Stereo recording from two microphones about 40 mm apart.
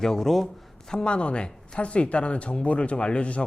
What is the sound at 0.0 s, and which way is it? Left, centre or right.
Speech, centre.